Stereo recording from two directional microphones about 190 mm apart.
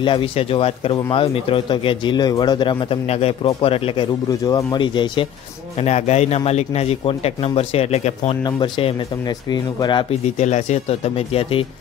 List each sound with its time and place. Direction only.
0.0 s speech: 25° left (ahead or behind)
5.8 s a man's voice: 35° left (ahead or behind)
10.2 s a man's voice: 35° left (ahead or behind)